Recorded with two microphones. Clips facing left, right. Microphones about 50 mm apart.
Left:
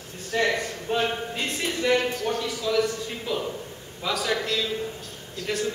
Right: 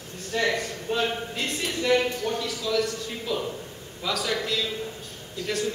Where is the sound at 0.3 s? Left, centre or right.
Centre.